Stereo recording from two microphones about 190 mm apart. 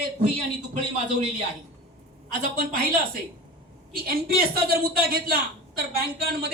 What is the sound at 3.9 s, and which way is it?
A woman's voice, 50° right (ahead or behind).